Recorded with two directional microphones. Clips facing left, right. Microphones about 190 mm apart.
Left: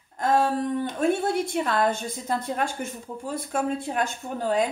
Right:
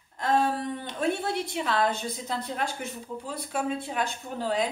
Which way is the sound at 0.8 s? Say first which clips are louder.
Left 3 dB; 50° left (ahead or behind).